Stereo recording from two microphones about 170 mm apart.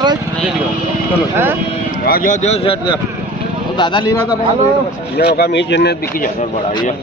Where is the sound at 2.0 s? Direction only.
55° left (ahead or behind); by 4.3 s 25° left (ahead or behind).